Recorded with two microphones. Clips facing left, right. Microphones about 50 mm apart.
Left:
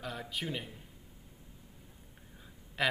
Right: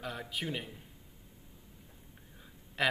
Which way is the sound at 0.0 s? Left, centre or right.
Centre.